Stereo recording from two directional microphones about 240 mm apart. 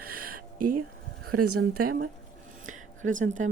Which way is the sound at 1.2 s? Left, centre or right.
Right.